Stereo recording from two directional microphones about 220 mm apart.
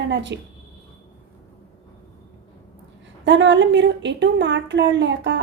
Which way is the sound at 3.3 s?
55° right (ahead or behind).